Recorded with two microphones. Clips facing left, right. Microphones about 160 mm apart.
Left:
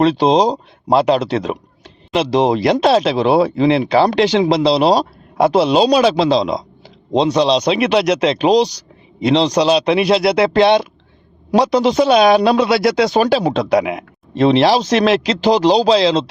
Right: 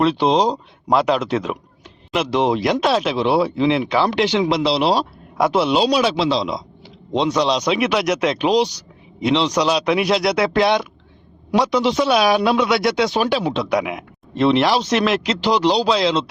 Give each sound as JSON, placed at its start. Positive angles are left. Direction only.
{"t": 0.0, "sound": "speech", "side_deg": 40}
{"t": 0.9, "sound": "speech", "side_deg": 30}
{"t": 16.0, "sound": "speech", "side_deg": 35}